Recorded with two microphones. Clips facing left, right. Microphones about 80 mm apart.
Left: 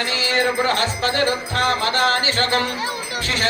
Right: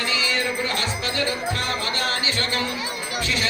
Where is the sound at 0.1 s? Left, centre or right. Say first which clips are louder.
Left 6 dB; left.